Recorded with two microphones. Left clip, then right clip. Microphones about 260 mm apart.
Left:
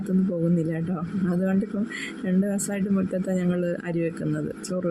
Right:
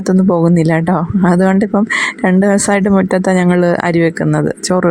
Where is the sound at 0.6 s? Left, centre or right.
Right.